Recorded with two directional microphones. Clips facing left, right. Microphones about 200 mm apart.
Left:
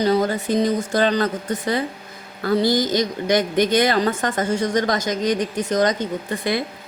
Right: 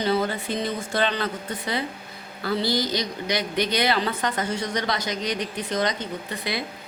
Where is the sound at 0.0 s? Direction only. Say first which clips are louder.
Left 5 dB; 40° left (ahead or behind).